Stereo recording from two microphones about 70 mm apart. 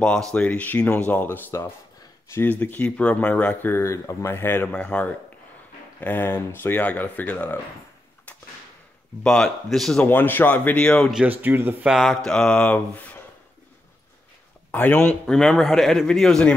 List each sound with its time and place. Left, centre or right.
0.0 s speech: centre
2.3 s speech: left
2.6 s speech: left
3.8 s speech: left
4.7 s mantra: centre
5.9 s speech: left
9.2 s mantra: centre
9.7 s a man's voice: centre
10.0 s speech: left
11.2 s speech: right
12.3 s mantra: centre
14.7 s speech: left
15.3 s a man's voice: centre